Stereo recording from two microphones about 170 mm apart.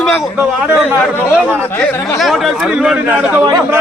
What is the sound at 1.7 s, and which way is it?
Chatter, 10° left (ahead or behind).